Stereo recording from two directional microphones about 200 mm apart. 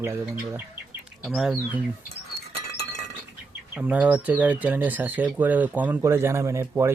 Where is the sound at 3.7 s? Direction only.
5° right (ahead or behind).